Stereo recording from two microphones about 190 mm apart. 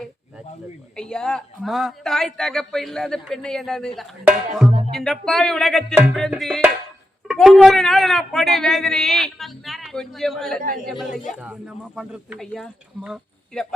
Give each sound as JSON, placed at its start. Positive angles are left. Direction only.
{"t": 0.9, "sound": "a woman's voice", "side_deg": 5}
{"t": 10.6, "sound": "speech", "side_deg": -45}
{"t": 11.3, "sound": "a woman's voice", "side_deg": -5}